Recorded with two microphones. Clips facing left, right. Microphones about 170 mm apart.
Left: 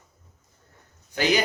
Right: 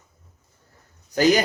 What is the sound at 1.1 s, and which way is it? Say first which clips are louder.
Speech: right 6 dB; 40° right (ahead or behind).